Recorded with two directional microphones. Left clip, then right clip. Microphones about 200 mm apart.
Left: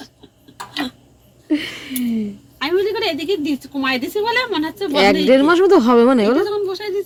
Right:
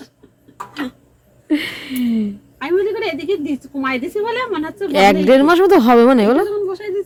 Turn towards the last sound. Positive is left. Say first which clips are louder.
# even
turn(degrees=-10)  # may be behind; listen again after turning